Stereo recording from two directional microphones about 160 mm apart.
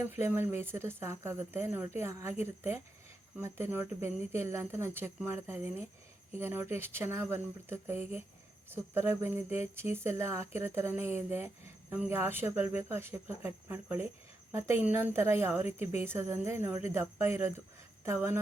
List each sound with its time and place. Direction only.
0.2 s a woman's voice: 15° right (ahead or behind)